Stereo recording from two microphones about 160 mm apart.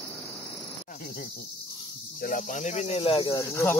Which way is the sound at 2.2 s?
55° left (ahead or behind).